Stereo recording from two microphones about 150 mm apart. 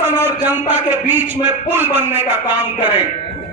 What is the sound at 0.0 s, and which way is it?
A man's voice, 15° right (ahead or behind).